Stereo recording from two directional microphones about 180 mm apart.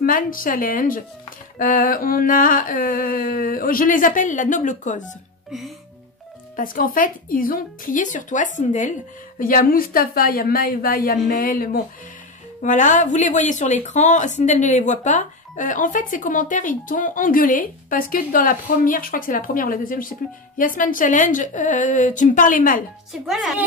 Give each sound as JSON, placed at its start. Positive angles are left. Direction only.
{"t": 0.0, "sound": "speech", "side_deg": 50}
{"t": 6.5, "sound": "speech", "side_deg": 50}
{"t": 23.2, "sound": "speech", "side_deg": 0}